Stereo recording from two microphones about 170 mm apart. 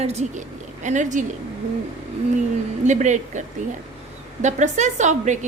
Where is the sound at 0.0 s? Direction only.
40° right (ahead or behind).